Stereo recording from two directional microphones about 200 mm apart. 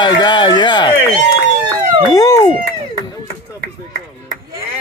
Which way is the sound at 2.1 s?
20° left (ahead or behind).